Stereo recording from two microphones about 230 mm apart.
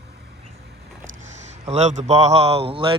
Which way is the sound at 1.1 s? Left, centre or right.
Right.